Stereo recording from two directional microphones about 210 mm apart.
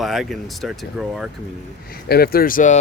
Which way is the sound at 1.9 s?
45° left (ahead or behind).